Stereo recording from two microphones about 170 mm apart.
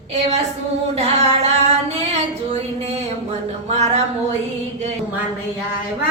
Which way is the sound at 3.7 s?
40° right (ahead or behind).